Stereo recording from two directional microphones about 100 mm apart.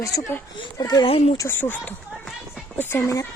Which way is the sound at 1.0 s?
75° left (ahead or behind).